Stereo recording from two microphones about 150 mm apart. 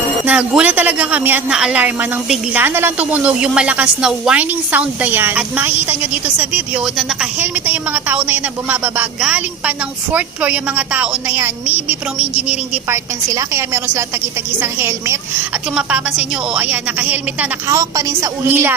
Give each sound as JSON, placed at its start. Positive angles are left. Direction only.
{"t": 0.3, "sound": "a woman's voice", "side_deg": -10}
{"t": 17.7, "sound": "a woman's voice", "side_deg": -20}